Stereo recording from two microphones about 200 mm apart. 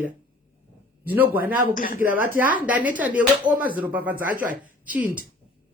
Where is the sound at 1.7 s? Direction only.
40° left (ahead or behind).